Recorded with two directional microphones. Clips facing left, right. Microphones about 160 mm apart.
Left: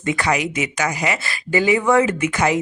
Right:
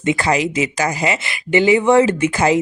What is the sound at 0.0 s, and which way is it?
A woman's voice, 25° right (ahead or behind).